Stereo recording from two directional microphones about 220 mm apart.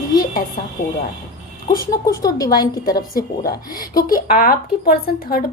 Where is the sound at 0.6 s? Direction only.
40° left (ahead or behind).